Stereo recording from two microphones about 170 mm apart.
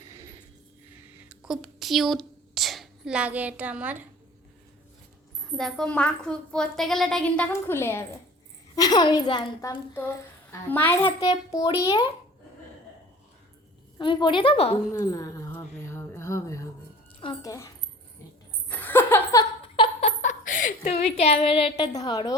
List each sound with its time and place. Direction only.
0.0 s a sound: 15° right (ahead or behind)
1.3 s a woman's voice: 5° right (ahead or behind)
5.5 s a woman's voice: 5° left (ahead or behind); by 12.0 s 20° left (ahead or behind)
14.0 s a woman's voice: 30° left (ahead or behind)
14.9 s a sound: 20° left (ahead or behind)
17.2 s a woman's voice: 30° left (ahead or behind)
18.7 s laughter: 10° left (ahead or behind)
19.6 s a sound: 30° left (ahead or behind)
21.9 s a woman's voice: 25° left (ahead or behind)